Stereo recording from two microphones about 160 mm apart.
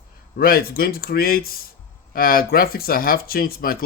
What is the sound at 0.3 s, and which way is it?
Speech, 70° left (ahead or behind).